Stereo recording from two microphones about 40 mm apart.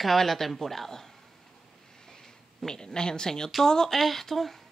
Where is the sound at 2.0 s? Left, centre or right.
Centre.